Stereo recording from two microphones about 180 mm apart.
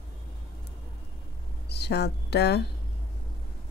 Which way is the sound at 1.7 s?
65° left (ahead or behind).